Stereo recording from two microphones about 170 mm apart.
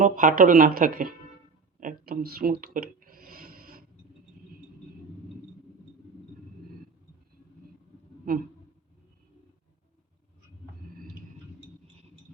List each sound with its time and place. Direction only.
0.0 s speech: 55° right (ahead or behind)
1.8 s a sound: 55° right (ahead or behind)
8.3 s speech: 55° right (ahead or behind)